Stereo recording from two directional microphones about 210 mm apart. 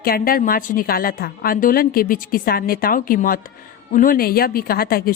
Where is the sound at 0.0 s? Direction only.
45° left (ahead or behind).